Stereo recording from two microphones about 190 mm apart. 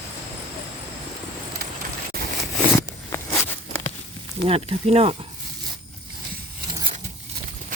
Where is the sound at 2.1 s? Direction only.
50° right (ahead or behind).